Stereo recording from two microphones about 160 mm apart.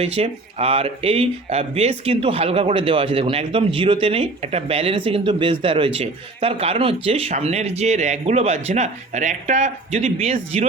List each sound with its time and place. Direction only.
0.0 s speech: 40° right (ahead or behind)